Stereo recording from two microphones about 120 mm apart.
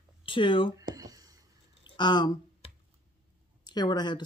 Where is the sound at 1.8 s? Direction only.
40° left (ahead or behind).